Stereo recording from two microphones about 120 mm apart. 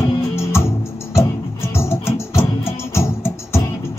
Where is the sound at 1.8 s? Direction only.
20° left (ahead or behind).